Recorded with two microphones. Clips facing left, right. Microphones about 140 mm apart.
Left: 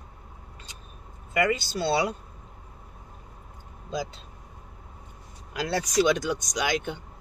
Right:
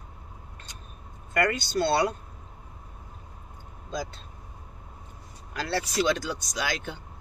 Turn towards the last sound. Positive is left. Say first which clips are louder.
# left 3 dB
turn(degrees=15)  # may be behind; listen again after turning